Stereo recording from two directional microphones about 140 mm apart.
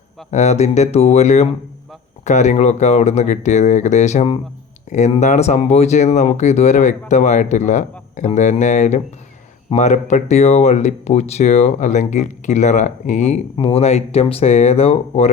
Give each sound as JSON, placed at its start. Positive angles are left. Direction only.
{"t": 0.3, "sound": "speech", "side_deg": 55}